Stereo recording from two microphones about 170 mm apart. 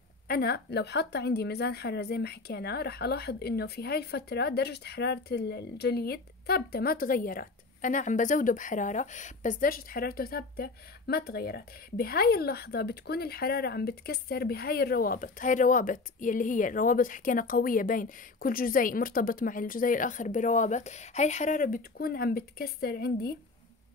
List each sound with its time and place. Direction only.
0.3 s a woman's voice: 65° left (ahead or behind)